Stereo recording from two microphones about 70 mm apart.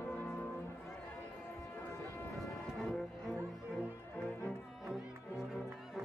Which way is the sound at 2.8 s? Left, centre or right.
Centre.